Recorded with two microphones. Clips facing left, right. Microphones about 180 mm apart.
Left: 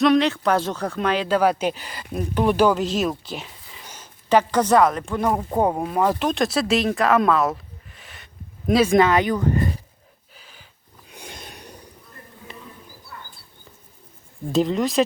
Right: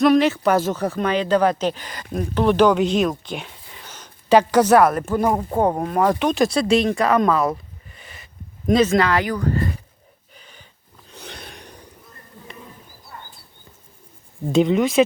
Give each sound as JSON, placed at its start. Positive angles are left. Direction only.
{"t": 0.0, "sound": "speech", "side_deg": -5}
{"t": 4.3, "sound": "a woman's voice", "side_deg": -10}
{"t": 5.5, "sound": "speech", "side_deg": 15}
{"t": 5.7, "sound": "speech", "side_deg": 0}
{"t": 9.0, "sound": "speech", "side_deg": 20}
{"t": 10.3, "sound": "snort", "side_deg": 5}
{"t": 11.1, "sound": "a sound", "side_deg": 10}
{"t": 13.1, "sound": "a sound", "side_deg": -35}
{"t": 14.5, "sound": "speech", "side_deg": 0}